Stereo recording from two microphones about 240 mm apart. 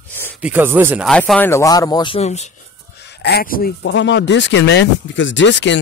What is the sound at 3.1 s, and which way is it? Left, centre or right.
Speech, left.